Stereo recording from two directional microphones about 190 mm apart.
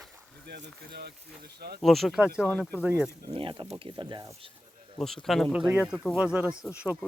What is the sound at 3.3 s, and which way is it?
Speech, 25° right (ahead or behind).